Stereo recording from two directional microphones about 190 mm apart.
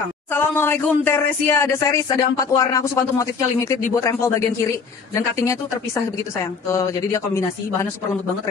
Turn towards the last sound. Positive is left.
turn(degrees=15)  # may be behind; listen again after turning